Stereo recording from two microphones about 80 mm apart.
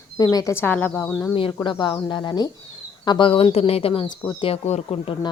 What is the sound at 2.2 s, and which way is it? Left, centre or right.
Speech, left.